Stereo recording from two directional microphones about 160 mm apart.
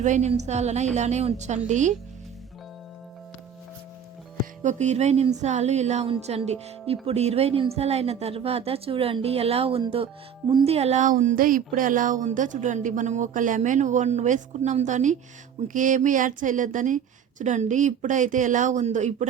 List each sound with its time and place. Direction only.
0.0 s speech: 45° right (ahead or behind)
4.6 s a woman's voice: 45° right (ahead or behind)